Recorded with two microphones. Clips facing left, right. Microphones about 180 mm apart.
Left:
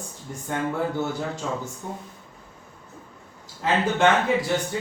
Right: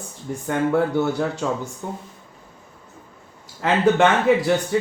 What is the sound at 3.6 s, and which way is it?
Speech, 75° right (ahead or behind).